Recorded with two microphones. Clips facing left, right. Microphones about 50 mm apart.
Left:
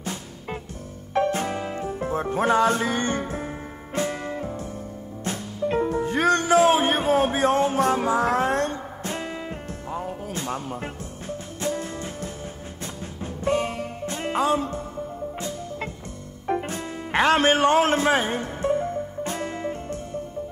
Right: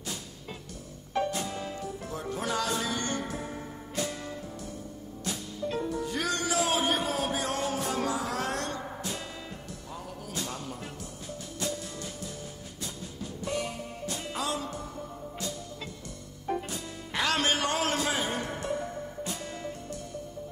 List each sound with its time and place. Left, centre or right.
0.0 s music: left